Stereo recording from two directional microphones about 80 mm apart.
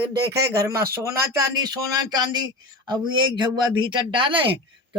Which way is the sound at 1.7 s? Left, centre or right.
Right.